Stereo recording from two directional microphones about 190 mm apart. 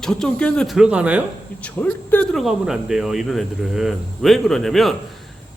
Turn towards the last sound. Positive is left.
turn(degrees=0)  # may be behind; listen again after turning